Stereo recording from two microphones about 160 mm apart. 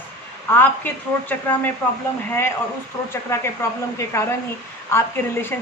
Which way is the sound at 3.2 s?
15° left (ahead or behind).